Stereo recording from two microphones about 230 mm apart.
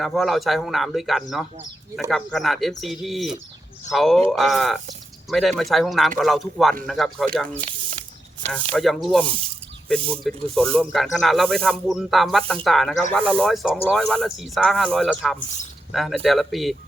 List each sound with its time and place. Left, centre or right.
0.0 s speech: centre
8.7 s speech: centre
10.5 s speech: centre